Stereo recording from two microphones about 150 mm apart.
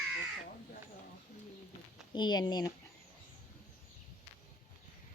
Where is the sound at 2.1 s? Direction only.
30° left (ahead or behind).